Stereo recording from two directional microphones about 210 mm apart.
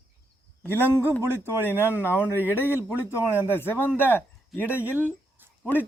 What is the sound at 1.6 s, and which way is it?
Speech, 10° left (ahead or behind).